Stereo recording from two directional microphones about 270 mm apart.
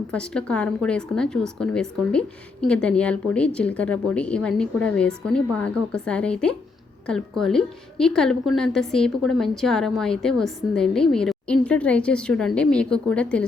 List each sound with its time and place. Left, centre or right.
0.1 s speech: centre